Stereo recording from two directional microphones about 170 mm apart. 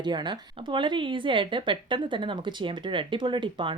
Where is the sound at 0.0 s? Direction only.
25° right (ahead or behind).